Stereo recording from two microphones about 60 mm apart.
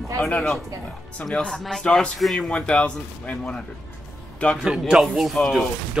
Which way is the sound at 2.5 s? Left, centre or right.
Centre.